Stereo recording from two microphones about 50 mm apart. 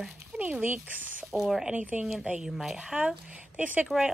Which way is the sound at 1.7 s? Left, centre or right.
Right.